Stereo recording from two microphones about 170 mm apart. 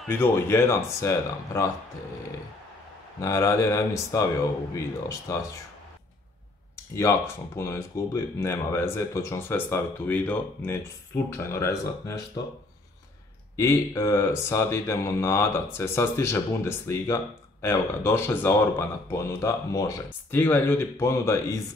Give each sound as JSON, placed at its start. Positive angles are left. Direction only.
{"t": 0.1, "sound": "speech", "side_deg": 15}
{"t": 3.2, "sound": "speech", "side_deg": 15}
{"t": 7.0, "sound": "speech", "side_deg": 15}
{"t": 13.6, "sound": "speech", "side_deg": 15}